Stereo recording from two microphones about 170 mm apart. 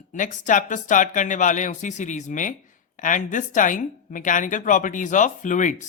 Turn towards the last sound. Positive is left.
turn(degrees=45)  # may be behind; listen again after turning